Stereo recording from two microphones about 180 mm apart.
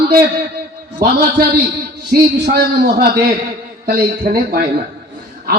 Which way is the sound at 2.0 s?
60° right (ahead or behind).